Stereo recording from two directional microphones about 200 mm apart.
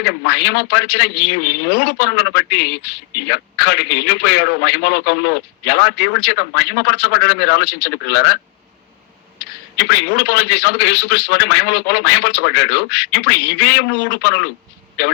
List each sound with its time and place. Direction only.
0.0 s a man's voice: 55° left (ahead or behind)
9.7 s a man's voice: 55° left (ahead or behind)